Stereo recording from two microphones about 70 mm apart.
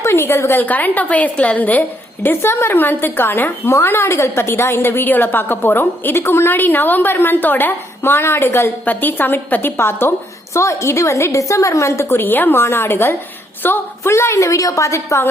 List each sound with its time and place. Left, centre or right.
0.0 s a woman's voice: left
0.6 s a woman's voice: left
2.2 s a woman's voice: left
10.6 s a woman's voice: left
14.1 s a woman's voice: left